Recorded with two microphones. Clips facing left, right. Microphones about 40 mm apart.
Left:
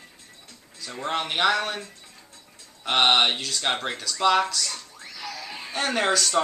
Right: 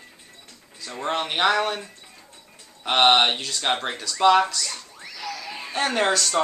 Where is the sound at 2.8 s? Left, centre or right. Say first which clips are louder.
Right 2 dB; centre.